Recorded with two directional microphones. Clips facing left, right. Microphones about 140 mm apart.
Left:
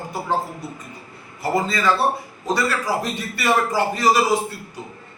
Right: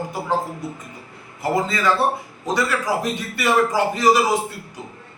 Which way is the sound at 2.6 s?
15° right (ahead or behind).